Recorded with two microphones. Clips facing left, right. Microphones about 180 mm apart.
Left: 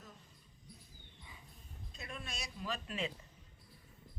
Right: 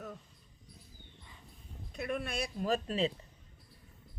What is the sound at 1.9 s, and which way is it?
Speech, 65° right (ahead or behind).